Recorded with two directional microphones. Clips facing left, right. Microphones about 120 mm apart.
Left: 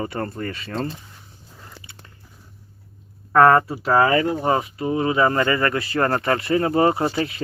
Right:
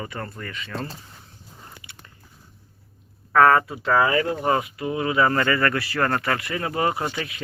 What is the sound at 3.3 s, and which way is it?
Speech, 15° left (ahead or behind).